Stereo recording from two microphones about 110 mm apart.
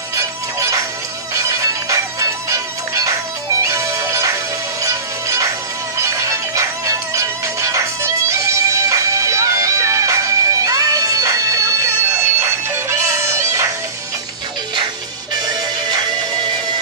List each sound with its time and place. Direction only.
0.1 s music: 30° right (ahead or behind)